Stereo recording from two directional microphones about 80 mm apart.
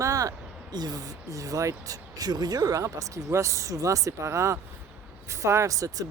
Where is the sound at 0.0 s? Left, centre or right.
Right.